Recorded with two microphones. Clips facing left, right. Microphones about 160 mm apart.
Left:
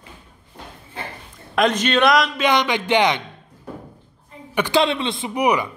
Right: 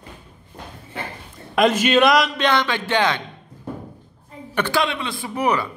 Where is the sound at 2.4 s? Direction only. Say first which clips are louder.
Left 2 dB; 15° left (ahead or behind).